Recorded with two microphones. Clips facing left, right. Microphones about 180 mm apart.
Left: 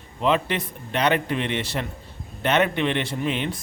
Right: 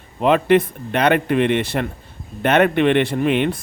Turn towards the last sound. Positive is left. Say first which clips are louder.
# right 8 dB
turn(degrees=-60)  # may be behind; listen again after turning